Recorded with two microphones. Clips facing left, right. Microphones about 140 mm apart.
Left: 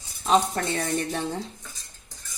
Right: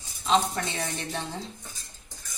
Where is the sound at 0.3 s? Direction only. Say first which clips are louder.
Left 3 dB; 50° left (ahead or behind).